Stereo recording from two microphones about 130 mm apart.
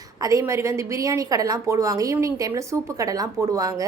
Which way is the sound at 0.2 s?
25° right (ahead or behind).